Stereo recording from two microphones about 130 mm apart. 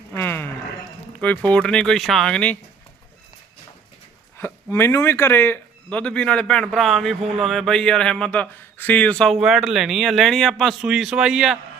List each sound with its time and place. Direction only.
0.2 s a sound: 15° left (ahead or behind)
1.2 s speech: 10° left (ahead or behind)
4.4 s speech: 20° left (ahead or behind); by 11.5 s 5° right (ahead or behind)